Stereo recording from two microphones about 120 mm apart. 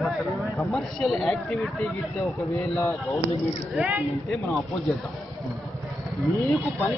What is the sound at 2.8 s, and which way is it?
Speech, 15° left (ahead or behind).